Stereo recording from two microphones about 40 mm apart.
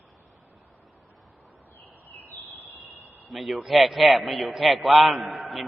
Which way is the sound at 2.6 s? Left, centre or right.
Right.